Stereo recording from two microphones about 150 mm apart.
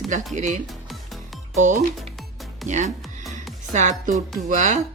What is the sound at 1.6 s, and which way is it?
Speech, 55° right (ahead or behind).